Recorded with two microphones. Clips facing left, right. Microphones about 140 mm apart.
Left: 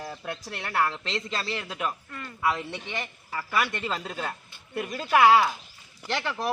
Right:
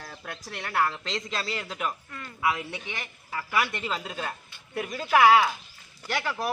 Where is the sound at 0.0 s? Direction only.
5° left (ahead or behind).